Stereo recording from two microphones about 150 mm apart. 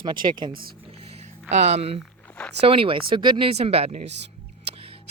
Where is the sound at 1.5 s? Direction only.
50° right (ahead or behind).